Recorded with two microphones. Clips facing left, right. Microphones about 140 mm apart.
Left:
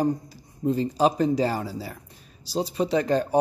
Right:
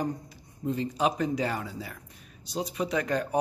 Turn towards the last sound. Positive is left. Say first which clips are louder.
# left 6 dB
turn(degrees=30)  # may be behind; listen again after turning